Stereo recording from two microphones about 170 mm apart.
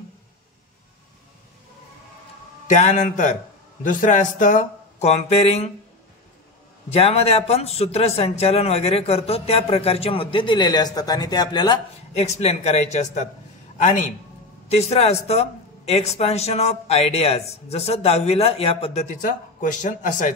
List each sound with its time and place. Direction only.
2.7 s speech: 45° left (ahead or behind)
6.9 s a man's voice: 35° left (ahead or behind)
12.2 s a man's voice: 40° left (ahead or behind)
19.0 s speech: 50° left (ahead or behind)